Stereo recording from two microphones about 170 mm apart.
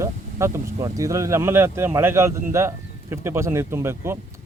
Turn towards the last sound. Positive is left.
turn(degrees=-15)  # may be behind; listen again after turning